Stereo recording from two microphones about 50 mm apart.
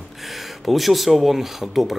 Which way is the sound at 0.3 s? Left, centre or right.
Centre.